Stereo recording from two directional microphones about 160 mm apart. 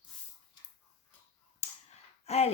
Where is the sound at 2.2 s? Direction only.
40° left (ahead or behind).